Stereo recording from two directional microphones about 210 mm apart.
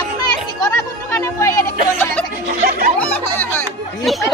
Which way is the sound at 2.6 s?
45° right (ahead or behind).